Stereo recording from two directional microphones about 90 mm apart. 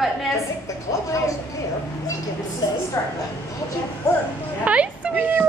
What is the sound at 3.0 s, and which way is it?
Speech, 30° left (ahead or behind).